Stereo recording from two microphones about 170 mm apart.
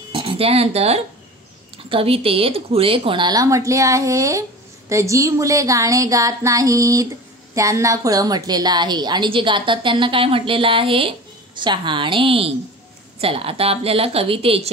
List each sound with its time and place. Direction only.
0.1 s a woman's voice: 35° right (ahead or behind)